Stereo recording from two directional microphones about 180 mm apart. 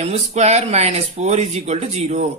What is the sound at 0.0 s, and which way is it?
Speech, 35° right (ahead or behind).